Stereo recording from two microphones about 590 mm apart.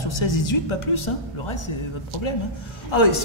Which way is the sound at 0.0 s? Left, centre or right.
Left.